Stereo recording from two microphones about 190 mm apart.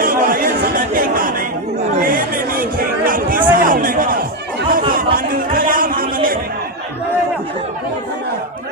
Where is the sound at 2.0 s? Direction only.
50° right (ahead or behind).